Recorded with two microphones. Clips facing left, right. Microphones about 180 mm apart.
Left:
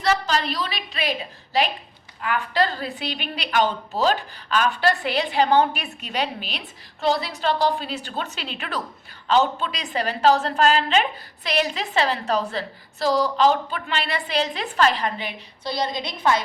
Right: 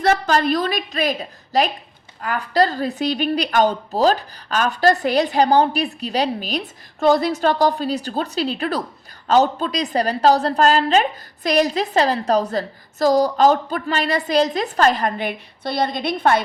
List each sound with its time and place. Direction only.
0.0 s a woman's voice: 50° right (ahead or behind)